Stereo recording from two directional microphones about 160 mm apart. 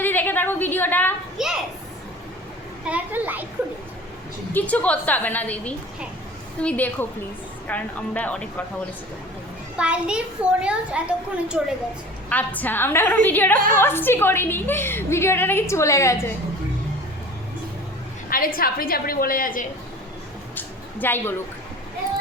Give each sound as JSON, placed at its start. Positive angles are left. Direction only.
{"t": 0.0, "sound": "a sound", "side_deg": 10}
{"t": 1.4, "sound": "children playing", "side_deg": -5}
{"t": 2.8, "sound": "a child's voice", "side_deg": -10}
{"t": 4.5, "sound": "a woman's voice", "side_deg": 10}
{"t": 9.7, "sound": "a child's voice", "side_deg": -5}
{"t": 12.3, "sound": "a woman's voice", "side_deg": 10}
{"t": 18.3, "sound": "a woman's voice", "side_deg": 65}
{"t": 20.6, "sound": "a sound", "side_deg": 10}